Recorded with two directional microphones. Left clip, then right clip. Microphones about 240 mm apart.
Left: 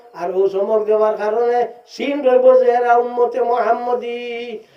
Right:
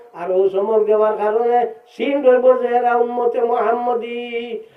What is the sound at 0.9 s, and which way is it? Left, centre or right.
Speech, left.